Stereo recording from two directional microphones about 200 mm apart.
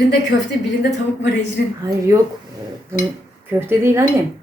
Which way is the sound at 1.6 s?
50° left (ahead or behind).